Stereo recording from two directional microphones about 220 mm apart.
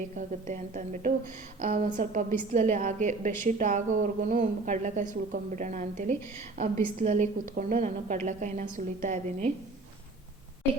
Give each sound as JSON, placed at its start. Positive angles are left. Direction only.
{"t": 0.2, "sound": "a woman's voice", "side_deg": -35}